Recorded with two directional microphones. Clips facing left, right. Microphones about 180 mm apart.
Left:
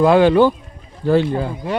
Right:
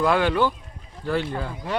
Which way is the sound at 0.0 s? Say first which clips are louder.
Left 9 dB; 30° left (ahead or behind).